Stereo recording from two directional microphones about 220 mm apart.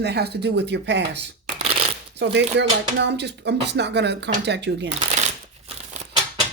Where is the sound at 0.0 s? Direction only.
50° right (ahead or behind).